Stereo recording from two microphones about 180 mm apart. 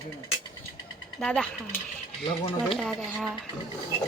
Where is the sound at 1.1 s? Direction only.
5° left (ahead or behind).